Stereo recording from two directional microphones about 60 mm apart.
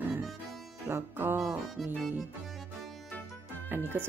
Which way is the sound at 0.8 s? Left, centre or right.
Right.